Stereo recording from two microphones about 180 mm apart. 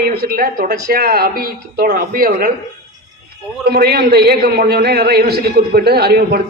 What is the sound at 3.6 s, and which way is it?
A man's voice, 60° right (ahead or behind).